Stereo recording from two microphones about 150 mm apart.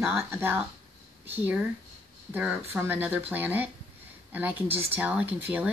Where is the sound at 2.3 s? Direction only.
10° right (ahead or behind).